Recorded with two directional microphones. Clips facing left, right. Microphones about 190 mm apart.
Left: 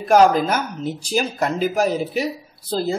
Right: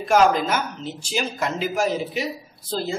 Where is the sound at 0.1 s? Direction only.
40° left (ahead or behind).